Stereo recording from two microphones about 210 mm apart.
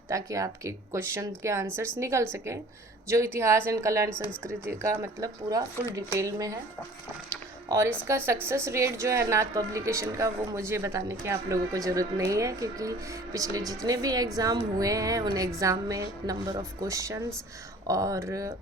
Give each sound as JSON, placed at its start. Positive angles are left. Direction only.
{"t": 0.1, "sound": "a woman's voice", "side_deg": -15}
{"t": 7.7, "sound": "a woman's voice", "side_deg": -15}